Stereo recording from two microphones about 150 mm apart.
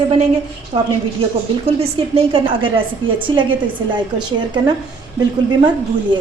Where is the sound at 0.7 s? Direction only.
40° right (ahead or behind).